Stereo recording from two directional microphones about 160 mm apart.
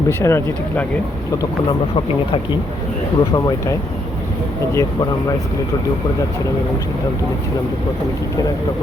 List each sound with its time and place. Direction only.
0.1 s speech: 15° left (ahead or behind)
3.2 s speech: 25° left (ahead or behind)